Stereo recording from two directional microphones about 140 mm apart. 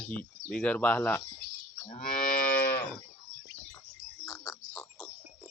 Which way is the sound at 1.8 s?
65° left (ahead or behind).